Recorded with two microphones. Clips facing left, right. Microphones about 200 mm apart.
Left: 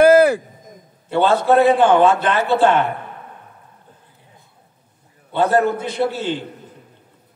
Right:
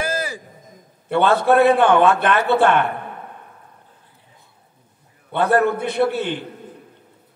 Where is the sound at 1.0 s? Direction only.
60° right (ahead or behind).